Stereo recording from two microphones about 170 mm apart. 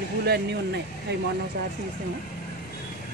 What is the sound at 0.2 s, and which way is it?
Speech, 75° right (ahead or behind).